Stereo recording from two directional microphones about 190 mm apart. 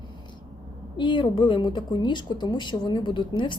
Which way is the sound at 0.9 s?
25° left (ahead or behind).